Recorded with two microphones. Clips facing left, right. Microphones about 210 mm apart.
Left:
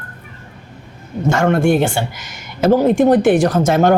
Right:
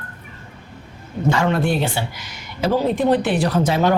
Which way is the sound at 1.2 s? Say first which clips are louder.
Left 5 dB; 50° left (ahead or behind).